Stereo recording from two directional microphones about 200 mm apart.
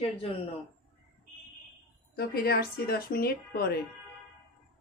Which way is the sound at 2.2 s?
50° left (ahead or behind).